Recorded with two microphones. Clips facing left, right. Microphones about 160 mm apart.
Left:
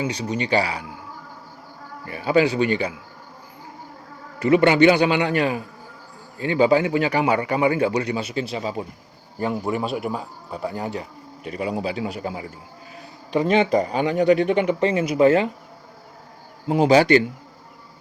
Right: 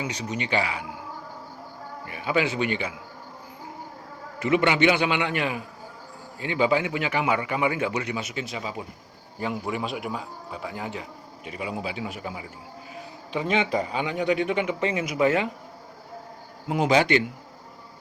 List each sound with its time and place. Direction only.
0.0 s a man's voice: 30° left (ahead or behind)
2.0 s a man's voice: 35° left (ahead or behind)
4.4 s a man's voice: 40° left (ahead or behind)
16.6 s a man's voice: 35° left (ahead or behind)